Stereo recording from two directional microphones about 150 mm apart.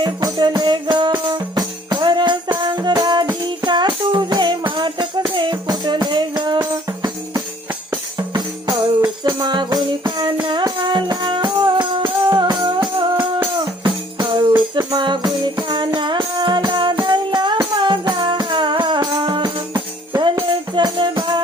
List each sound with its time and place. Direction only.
0.0 s music: 30° right (ahead or behind)
13.8 s music: 30° right (ahead or behind)